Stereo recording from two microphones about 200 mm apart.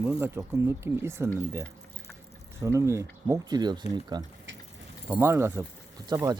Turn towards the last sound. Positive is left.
turn(degrees=-20)  # may be behind; listen again after turning